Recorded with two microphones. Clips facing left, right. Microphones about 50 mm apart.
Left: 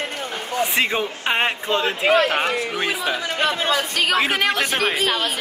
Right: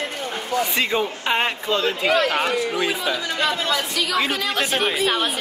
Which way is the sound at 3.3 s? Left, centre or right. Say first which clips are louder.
Left 3 dB; left.